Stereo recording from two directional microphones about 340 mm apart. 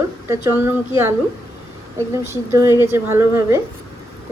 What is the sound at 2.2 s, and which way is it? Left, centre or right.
A woman's voice, centre.